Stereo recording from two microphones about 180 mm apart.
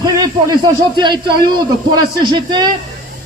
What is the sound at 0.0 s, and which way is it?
A man's voice, 20° right (ahead or behind).